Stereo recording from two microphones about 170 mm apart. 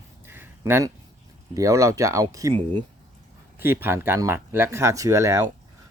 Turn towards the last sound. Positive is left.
turn(degrees=-15)  # may be behind; listen again after turning